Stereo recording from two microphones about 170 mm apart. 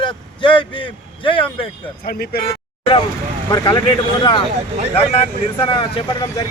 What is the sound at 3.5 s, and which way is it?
Speech, 25° left (ahead or behind).